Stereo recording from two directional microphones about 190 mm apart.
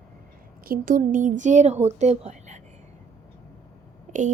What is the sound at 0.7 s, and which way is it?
A woman's voice, 45° right (ahead or behind).